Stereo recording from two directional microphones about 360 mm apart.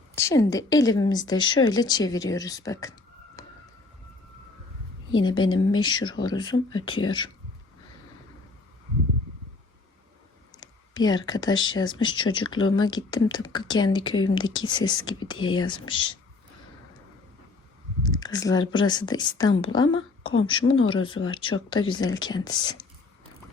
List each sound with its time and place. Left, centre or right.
0.2 s speech: centre
3.4 s emergency vehicle: centre
5.1 s speech: centre
10.6 s speech: centre
18.0 s speech: centre
19.9 s a woman's voice: left
20.9 s speech: centre